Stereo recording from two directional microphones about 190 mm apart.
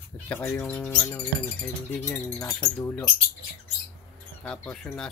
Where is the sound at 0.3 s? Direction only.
10° left (ahead or behind).